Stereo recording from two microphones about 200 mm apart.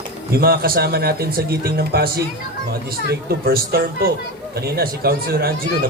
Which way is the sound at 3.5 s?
50° right (ahead or behind).